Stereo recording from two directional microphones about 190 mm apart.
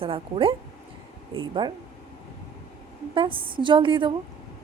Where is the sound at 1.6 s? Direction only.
25° right (ahead or behind).